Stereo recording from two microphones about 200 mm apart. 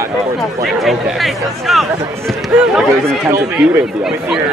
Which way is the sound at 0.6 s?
Centre (ahead or behind).